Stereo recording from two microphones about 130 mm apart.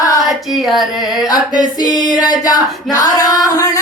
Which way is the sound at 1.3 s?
30° left (ahead or behind).